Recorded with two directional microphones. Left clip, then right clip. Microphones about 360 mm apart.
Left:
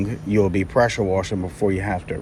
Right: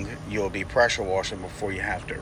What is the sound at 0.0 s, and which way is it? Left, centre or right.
Speech, centre.